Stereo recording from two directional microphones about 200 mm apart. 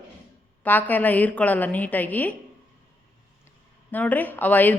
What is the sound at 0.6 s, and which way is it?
A woman's voice, 10° left (ahead or behind).